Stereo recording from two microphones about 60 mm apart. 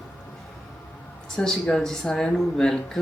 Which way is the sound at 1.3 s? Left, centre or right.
Centre.